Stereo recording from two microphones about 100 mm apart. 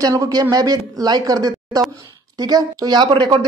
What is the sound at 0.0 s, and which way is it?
A man's voice, 40° right (ahead or behind).